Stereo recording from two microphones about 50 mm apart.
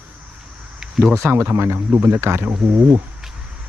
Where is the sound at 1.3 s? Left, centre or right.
Right.